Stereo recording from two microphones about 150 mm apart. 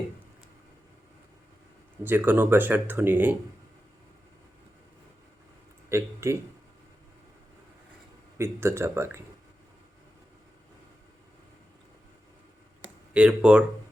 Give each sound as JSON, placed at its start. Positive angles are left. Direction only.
{"t": 2.0, "sound": "speech", "side_deg": -15}
{"t": 5.9, "sound": "speech", "side_deg": -15}
{"t": 8.4, "sound": "speech", "side_deg": -15}
{"t": 13.1, "sound": "speech", "side_deg": -5}